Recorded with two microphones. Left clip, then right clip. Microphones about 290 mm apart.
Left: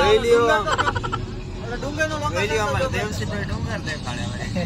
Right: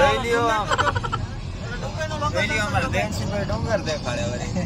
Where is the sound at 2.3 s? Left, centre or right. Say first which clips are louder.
Right 1 dB; left.